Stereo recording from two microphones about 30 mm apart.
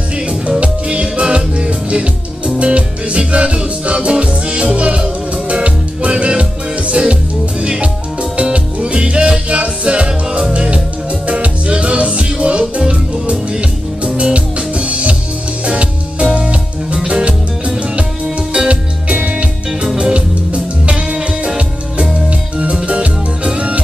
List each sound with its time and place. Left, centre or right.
0.6 s music: right
6.9 s music: right
18.7 s music: right